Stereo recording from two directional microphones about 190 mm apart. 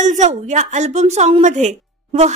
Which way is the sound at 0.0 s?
40° right (ahead or behind).